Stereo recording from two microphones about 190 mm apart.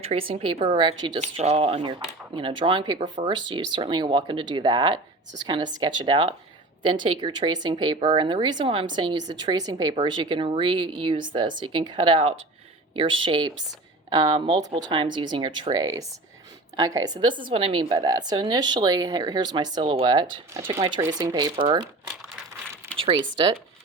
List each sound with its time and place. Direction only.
0.0 s speech: 30° right (ahead or behind)